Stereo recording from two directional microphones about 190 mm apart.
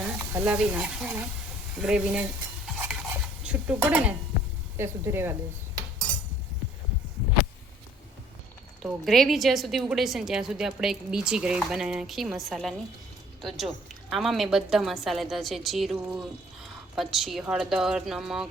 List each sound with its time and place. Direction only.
0.0 s a woman's voice: 10° right (ahead or behind)
2.7 s stir: 5° right (ahead or behind)
4.8 s speech: 15° right (ahead or behind)
8.8 s a woman's voice: centre (ahead or behind)